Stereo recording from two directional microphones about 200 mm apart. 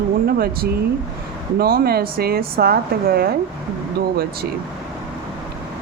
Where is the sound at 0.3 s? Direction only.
50° right (ahead or behind).